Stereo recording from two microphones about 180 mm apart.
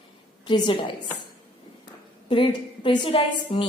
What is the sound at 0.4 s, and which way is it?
Speech, 25° left (ahead or behind).